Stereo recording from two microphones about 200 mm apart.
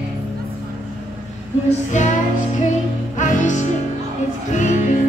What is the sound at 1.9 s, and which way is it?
Music, 35° left (ahead or behind).